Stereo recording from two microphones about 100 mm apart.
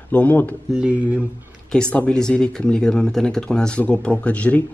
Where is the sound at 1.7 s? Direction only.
10° left (ahead or behind).